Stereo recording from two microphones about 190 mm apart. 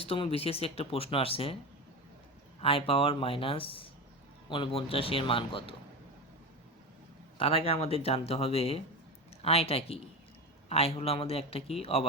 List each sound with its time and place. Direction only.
0.0 s speech: 30° left (ahead or behind)
2.6 s speech: 30° left (ahead or behind)
7.3 s speech: 30° left (ahead or behind)